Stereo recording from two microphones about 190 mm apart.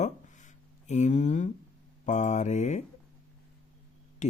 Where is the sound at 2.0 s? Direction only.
40° left (ahead or behind).